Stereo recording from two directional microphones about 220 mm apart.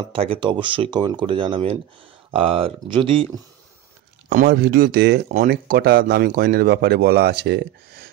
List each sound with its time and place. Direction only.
0.1 s speech: 25° right (ahead or behind)
4.3 s speech: 40° right (ahead or behind)